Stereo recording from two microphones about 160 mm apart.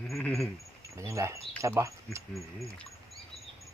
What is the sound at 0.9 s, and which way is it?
Speech, 20° right (ahead or behind).